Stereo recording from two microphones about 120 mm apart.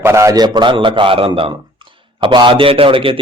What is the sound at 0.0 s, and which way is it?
A man's voice, 25° right (ahead or behind).